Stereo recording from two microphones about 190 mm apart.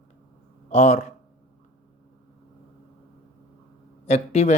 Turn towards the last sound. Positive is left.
turn(degrees=35)  # may be behind; listen again after turning